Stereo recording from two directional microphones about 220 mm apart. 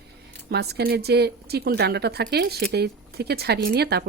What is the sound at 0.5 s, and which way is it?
Speech, 45° right (ahead or behind).